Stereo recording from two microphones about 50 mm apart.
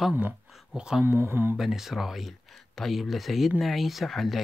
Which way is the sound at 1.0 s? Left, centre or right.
Right.